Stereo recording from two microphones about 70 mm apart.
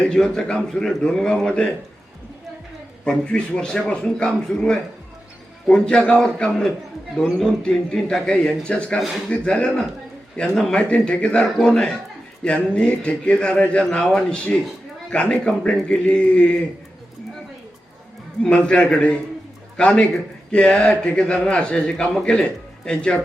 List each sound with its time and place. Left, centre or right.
0.0 s speech: centre
3.0 s a man's voice: centre
18.4 s speech: centre